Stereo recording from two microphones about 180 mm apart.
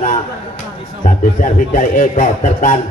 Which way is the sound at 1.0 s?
50° left (ahead or behind).